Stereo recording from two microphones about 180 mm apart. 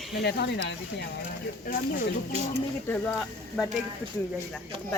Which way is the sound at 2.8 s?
5° left (ahead or behind).